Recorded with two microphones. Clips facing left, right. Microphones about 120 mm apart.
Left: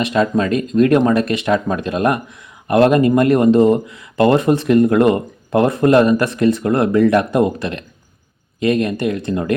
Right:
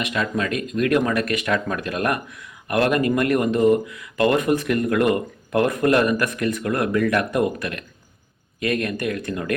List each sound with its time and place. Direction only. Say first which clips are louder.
0.0 s speech: left 8 dB; 30° left (ahead or behind)